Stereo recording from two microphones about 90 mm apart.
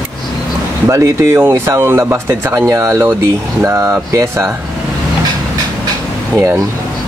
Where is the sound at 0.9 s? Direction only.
25° right (ahead or behind).